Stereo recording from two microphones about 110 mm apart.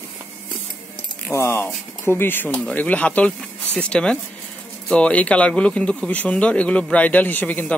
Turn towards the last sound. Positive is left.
turn(degrees=15)  # may be behind; listen again after turning